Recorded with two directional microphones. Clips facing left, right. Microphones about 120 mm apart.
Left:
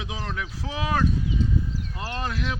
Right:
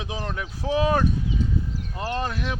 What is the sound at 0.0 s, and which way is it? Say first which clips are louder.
Speech: right 2 dB; 20° right (ahead or behind).